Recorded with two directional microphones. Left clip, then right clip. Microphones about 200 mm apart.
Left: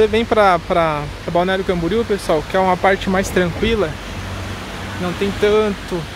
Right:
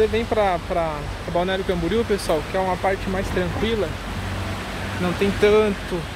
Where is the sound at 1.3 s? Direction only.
25° left (ahead or behind).